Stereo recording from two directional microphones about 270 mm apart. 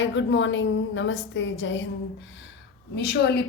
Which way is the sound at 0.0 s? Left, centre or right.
Left.